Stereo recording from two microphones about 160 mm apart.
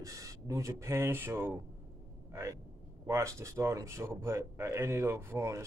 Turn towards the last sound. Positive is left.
turn(degrees=-20)  # may be behind; listen again after turning